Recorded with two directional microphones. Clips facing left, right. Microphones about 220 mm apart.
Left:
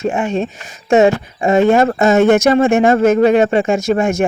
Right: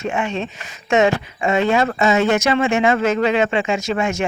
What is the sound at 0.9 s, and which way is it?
Speech, 35° left (ahead or behind).